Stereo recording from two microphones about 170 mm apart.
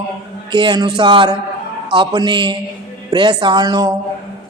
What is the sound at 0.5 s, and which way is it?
Speech, 25° right (ahead or behind).